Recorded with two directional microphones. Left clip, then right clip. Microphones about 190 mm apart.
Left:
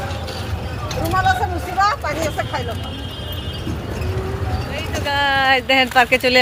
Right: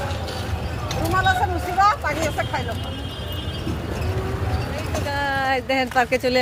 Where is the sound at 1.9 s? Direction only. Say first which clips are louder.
Even; 40° left (ahead or behind).